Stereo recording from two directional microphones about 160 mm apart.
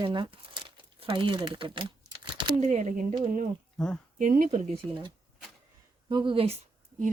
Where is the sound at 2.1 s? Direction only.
30° right (ahead or behind).